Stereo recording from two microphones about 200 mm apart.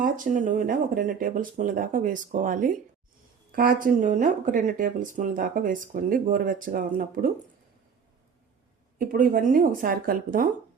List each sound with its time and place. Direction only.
0.0 s speech: 40° right (ahead or behind)
9.0 s speech: 45° right (ahead or behind)